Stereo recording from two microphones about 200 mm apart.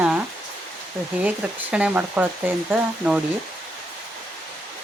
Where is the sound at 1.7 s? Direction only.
5° right (ahead or behind).